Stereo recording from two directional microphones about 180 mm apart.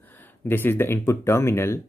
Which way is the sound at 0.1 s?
10° left (ahead or behind).